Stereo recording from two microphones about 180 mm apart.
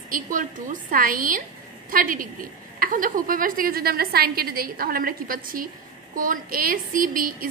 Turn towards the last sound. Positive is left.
turn(degrees=-50)  # may be behind; listen again after turning